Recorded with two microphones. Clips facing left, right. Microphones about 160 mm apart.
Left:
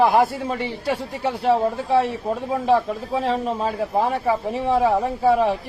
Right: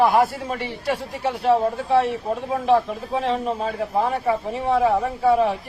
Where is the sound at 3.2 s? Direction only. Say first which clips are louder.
Left 1 dB; 35° left (ahead or behind).